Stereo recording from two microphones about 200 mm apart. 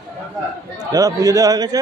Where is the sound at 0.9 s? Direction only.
15° right (ahead or behind).